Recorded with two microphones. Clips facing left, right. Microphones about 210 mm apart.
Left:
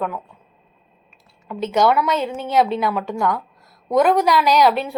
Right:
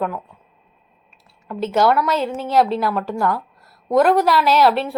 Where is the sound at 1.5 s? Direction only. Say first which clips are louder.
Even; 5° right (ahead or behind).